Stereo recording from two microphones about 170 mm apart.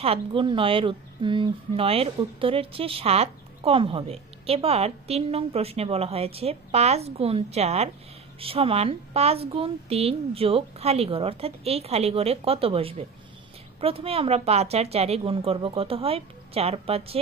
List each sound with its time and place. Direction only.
0.0 s speech: 30° right (ahead or behind)